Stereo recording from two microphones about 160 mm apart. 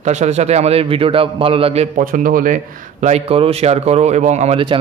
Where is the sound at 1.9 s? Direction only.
55° right (ahead or behind).